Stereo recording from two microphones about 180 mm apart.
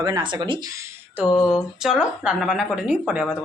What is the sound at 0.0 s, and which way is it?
Speech, 25° right (ahead or behind).